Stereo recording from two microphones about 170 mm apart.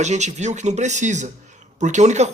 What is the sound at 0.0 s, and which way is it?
Speech, 45° right (ahead or behind).